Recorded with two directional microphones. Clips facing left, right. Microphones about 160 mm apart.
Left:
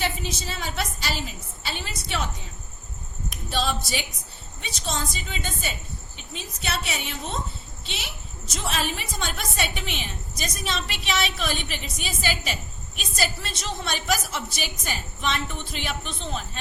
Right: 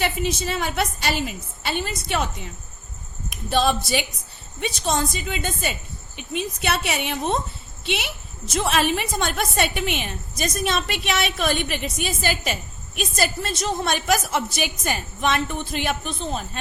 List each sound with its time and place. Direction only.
0.0 s a woman's voice: 60° right (ahead or behind)
3.5 s a woman's voice: 55° right (ahead or behind)
8.5 s a woman's voice: 65° right (ahead or behind); by 16.5 s 45° right (ahead or behind)